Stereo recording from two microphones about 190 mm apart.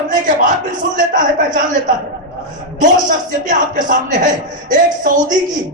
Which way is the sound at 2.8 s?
45° right (ahead or behind).